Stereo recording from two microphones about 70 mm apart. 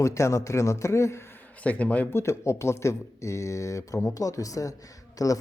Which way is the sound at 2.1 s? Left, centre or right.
Left.